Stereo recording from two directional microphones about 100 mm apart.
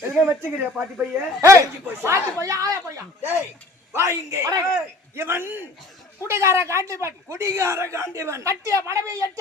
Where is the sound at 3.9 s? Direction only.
30° right (ahead or behind).